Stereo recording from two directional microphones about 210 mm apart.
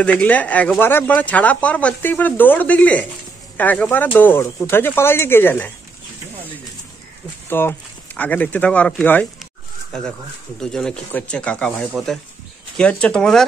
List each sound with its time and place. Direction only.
0.0 s speech: 5° left (ahead or behind)
7.4 s speech: 10° left (ahead or behind)